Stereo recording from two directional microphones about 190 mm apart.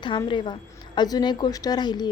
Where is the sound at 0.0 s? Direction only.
25° left (ahead or behind).